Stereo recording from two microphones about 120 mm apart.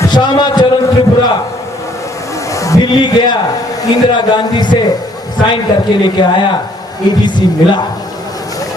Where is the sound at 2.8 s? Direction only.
40° left (ahead or behind).